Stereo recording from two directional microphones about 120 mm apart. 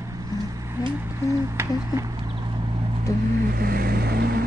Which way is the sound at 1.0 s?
25° right (ahead or behind).